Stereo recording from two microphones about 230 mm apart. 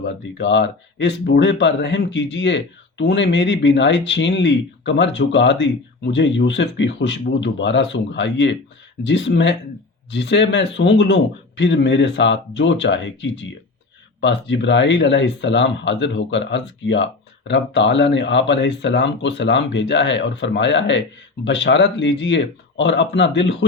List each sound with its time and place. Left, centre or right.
0.0 s speech: left